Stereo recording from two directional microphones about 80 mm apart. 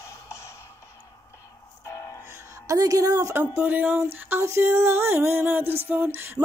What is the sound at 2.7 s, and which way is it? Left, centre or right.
Speech, right.